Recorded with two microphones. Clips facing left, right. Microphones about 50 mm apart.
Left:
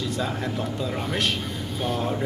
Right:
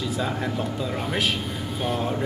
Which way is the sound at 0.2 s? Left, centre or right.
Centre.